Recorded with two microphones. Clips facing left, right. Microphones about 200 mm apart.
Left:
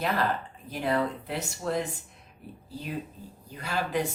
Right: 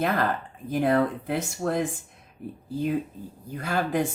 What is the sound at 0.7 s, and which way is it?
Speech, 50° right (ahead or behind).